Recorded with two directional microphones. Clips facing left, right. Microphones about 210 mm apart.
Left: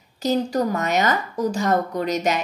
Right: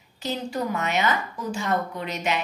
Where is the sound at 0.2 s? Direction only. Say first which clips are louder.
Left 7 dB; 40° left (ahead or behind).